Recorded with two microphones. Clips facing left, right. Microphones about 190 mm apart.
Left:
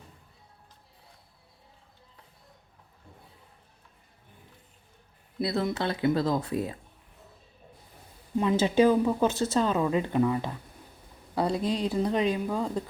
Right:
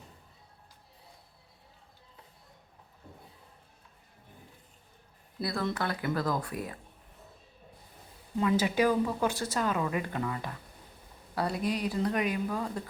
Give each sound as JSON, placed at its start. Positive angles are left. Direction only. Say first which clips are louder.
{"t": 5.4, "sound": "speech", "louder": "left 4 dB", "side_deg": 20}
{"t": 8.4, "sound": "speech", "louder": "left 4 dB", "side_deg": 25}